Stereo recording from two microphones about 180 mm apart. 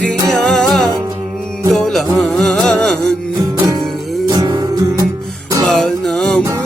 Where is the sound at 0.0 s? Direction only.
5° left (ahead or behind).